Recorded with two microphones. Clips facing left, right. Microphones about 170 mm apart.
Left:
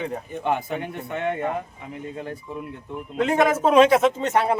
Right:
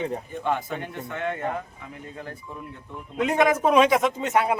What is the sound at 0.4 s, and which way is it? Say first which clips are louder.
Speech: left 3 dB; 15° left (ahead or behind).